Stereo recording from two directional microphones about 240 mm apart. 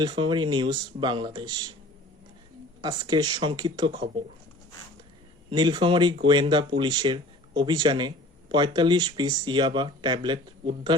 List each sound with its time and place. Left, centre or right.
0.0 s speech: centre
2.8 s speech: centre
5.5 s speech: centre